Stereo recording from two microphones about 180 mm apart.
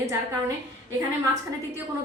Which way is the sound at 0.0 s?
15° right (ahead or behind).